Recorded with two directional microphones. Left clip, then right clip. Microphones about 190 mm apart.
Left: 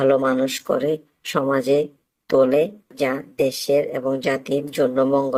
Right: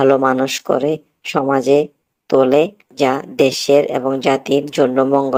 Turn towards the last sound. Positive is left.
turn(degrees=-15)  # may be behind; listen again after turning